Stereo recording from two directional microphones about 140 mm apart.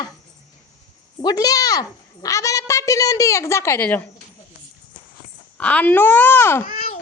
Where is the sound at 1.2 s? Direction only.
30° left (ahead or behind); by 4.1 s 10° left (ahead or behind).